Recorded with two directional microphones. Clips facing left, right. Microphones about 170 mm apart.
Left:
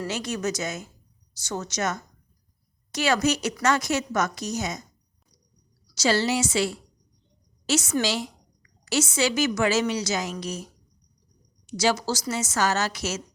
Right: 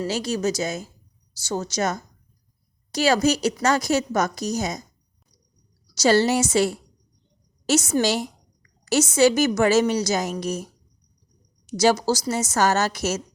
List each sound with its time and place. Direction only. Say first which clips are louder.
0.0 s a woman's voice: right 4 dB; 30° right (ahead or behind)
6.0 s a woman's voice: right 5 dB; 45° right (ahead or behind)
11.8 s a woman's voice: right 5 dB; 40° right (ahead or behind)